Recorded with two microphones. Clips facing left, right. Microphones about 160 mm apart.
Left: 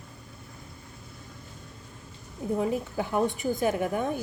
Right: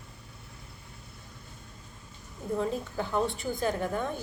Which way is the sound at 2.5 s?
15° left (ahead or behind).